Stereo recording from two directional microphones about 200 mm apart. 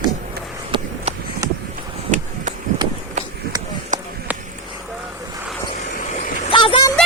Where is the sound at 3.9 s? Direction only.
40° right (ahead or behind).